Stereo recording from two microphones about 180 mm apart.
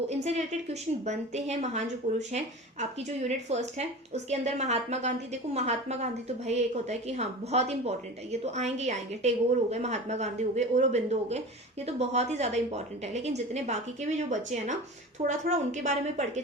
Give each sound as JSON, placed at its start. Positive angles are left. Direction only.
{"t": 0.2, "sound": "a woman's voice", "side_deg": -40}